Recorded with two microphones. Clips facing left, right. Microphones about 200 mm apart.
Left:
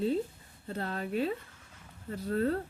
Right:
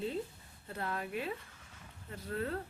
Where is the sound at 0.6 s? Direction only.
30° left (ahead or behind).